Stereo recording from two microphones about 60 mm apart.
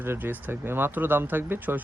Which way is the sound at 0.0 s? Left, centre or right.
Right.